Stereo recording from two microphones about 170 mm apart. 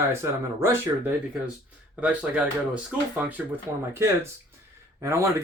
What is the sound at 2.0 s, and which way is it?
Speech, 5° right (ahead or behind).